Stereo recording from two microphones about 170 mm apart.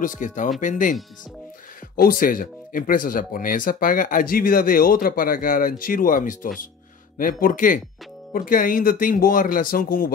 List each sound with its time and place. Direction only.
0.0 s speech: 50° left (ahead or behind)
2.0 s speech: 60° left (ahead or behind)